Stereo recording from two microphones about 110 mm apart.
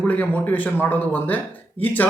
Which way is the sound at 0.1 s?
15° left (ahead or behind).